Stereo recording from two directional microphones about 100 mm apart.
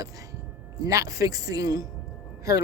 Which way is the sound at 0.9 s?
35° right (ahead or behind).